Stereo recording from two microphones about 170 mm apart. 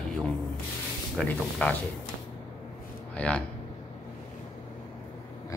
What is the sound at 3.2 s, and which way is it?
Speech, 5° left (ahead or behind).